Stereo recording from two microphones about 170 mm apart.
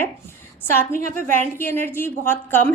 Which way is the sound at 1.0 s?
45° right (ahead or behind).